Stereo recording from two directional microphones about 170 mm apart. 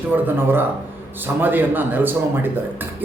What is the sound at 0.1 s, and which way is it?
Speech, 10° right (ahead or behind).